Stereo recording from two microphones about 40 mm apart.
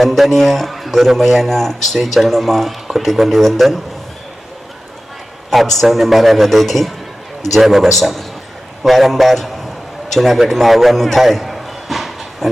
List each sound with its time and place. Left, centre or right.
0.0 s a man's voice: centre
5.5 s a man's voice: centre
10.5 s a sound: centre